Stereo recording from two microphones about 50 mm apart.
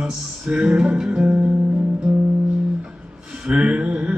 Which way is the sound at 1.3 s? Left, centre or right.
Right.